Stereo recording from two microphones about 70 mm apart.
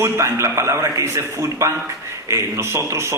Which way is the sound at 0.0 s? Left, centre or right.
Right.